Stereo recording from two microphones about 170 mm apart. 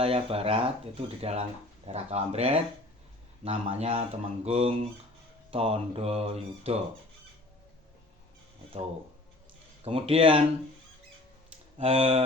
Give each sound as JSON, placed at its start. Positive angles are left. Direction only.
{"t": 0.0, "sound": "speech", "side_deg": -35}
{"t": 9.8, "sound": "speech", "side_deg": -35}
{"t": 11.8, "sound": "speech", "side_deg": -35}